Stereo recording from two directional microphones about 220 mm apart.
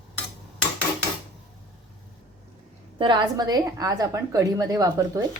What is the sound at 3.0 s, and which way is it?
A woman's voice, 20° right (ahead or behind).